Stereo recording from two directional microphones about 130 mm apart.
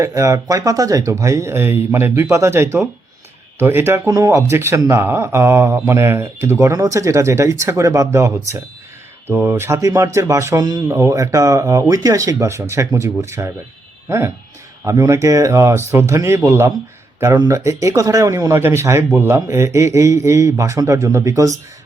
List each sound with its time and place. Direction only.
0.0 s speech: 25° right (ahead or behind)
14.8 s speech: 25° right (ahead or behind)